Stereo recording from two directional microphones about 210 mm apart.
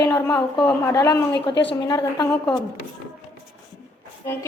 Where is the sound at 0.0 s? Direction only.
15° left (ahead or behind).